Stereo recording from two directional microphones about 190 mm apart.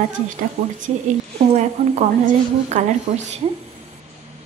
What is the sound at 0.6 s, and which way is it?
A woman's voice, 40° right (ahead or behind).